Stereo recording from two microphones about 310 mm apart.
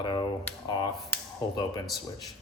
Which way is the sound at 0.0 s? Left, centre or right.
Centre.